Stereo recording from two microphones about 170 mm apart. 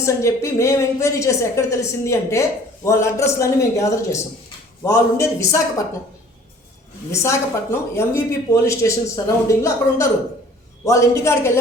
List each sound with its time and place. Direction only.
0.0 s a woman's voice: 15° left (ahead or behind)
7.1 s a woman's voice: 15° left (ahead or behind)